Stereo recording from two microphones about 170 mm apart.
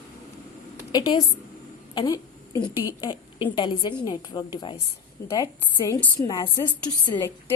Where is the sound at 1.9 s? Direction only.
20° left (ahead or behind).